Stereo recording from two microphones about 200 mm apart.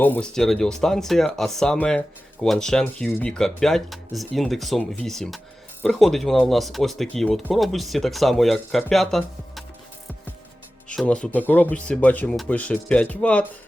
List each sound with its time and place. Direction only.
0.0 s speech: 5° left (ahead or behind)
10.8 s speech: 5° left (ahead or behind)